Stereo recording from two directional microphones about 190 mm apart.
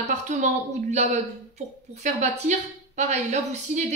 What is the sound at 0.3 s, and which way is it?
Speech, 40° right (ahead or behind).